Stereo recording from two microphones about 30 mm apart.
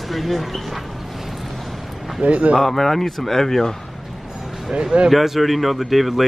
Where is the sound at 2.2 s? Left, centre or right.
Right.